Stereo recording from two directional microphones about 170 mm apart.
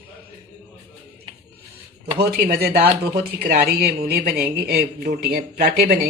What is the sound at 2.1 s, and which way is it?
Speech, 70° right (ahead or behind).